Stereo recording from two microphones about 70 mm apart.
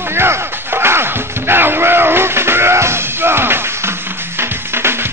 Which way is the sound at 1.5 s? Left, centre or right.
Right.